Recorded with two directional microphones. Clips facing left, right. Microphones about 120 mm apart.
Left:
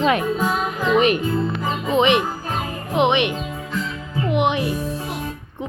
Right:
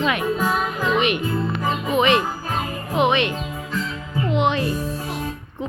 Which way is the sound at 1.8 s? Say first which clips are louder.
Left 2 dB; 25° left (ahead or behind).